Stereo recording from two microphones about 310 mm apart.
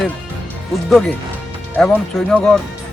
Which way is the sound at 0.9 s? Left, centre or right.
Centre.